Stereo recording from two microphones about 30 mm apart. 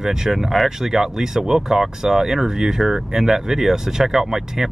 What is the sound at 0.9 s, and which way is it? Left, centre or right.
Speech, centre.